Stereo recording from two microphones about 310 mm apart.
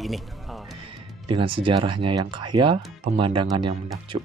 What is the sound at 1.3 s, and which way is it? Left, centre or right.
Speech, centre.